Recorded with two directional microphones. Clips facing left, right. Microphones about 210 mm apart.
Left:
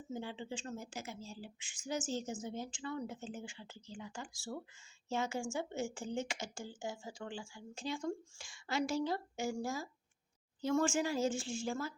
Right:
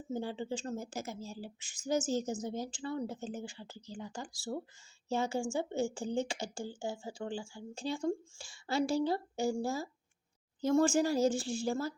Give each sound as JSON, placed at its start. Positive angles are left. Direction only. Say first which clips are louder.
{"t": 0.1, "sound": "speech", "louder": "right 6 dB", "side_deg": -40}